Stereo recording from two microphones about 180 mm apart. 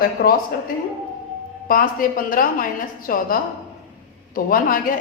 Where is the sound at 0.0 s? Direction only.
55° left (ahead or behind).